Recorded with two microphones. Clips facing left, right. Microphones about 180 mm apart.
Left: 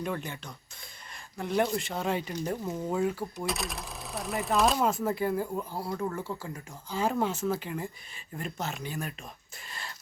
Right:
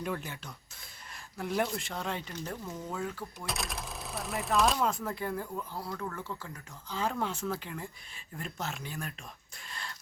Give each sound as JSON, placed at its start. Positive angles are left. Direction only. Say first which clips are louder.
{"t": 0.0, "sound": "speech", "louder": "left 2 dB", "side_deg": -5}
{"t": 3.3, "sound": "speech", "louder": "left 5 dB", "side_deg": 0}
{"t": 6.0, "sound": "speech", "louder": "left 6 dB", "side_deg": 25}
{"t": 6.9, "sound": "speech", "louder": "left 5 dB", "side_deg": 10}
{"t": 9.6, "sound": "a sound", "louder": "left 1 dB", "side_deg": 5}